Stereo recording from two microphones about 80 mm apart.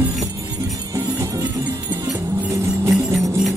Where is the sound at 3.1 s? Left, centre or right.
Centre.